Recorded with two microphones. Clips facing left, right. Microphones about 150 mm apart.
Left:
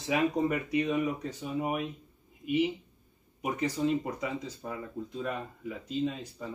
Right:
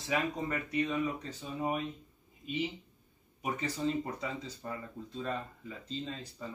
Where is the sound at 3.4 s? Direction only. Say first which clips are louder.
Left 4 dB; 15° left (ahead or behind).